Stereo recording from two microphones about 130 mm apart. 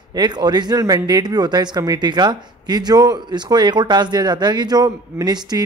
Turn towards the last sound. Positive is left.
turn(degrees=-30)  # may be behind; listen again after turning